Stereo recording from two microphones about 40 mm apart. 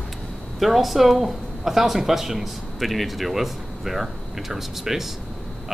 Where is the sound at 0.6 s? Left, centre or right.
Centre.